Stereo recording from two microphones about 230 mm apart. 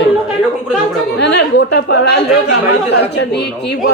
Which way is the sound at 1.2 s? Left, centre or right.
Left.